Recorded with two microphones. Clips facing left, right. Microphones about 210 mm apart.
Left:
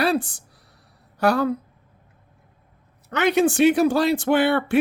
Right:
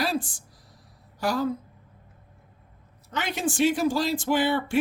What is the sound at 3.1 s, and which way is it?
Speech, 65° left (ahead or behind).